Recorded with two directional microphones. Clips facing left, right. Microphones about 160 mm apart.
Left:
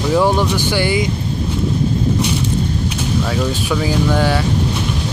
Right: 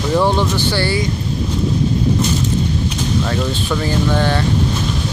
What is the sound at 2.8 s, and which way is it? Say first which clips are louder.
Speech: even; 5° left (ahead or behind).